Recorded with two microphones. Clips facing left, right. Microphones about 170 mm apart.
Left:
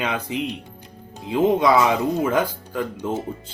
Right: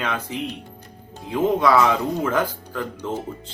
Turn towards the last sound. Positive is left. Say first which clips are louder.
# left 2 dB
turn(degrees=10)  # may be behind; listen again after turning